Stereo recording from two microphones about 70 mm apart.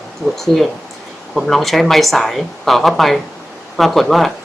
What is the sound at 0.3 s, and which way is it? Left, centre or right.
Speech, centre.